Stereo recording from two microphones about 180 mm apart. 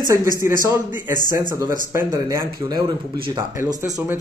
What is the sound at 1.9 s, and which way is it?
Speech, 15° right (ahead or behind).